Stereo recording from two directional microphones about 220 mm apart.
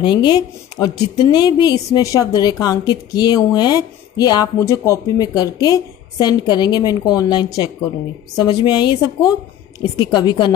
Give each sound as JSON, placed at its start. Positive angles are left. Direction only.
{"t": 0.0, "sound": "a woman's voice", "side_deg": 20}